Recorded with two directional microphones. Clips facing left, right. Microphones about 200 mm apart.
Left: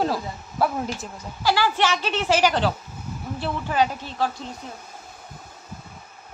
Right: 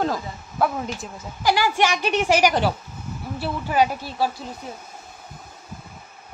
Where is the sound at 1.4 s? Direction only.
15° right (ahead or behind).